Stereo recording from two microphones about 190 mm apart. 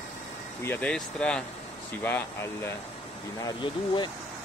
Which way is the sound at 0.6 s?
10° left (ahead or behind).